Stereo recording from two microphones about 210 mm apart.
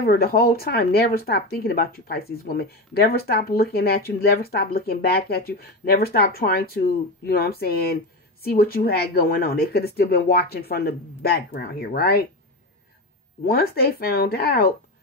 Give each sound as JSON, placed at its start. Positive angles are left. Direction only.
{"t": 0.0, "sound": "speech", "side_deg": 45}
{"t": 13.4, "sound": "speech", "side_deg": 45}